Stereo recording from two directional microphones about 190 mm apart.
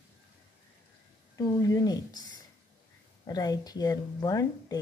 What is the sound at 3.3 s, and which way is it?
A woman's voice, 20° left (ahead or behind).